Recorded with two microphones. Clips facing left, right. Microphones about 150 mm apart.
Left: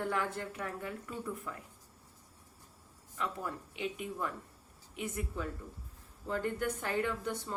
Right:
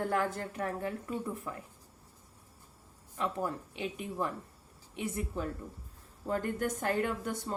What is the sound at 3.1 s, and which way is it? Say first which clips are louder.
A woman's voice: right 4 dB; 35° right (ahead or behind).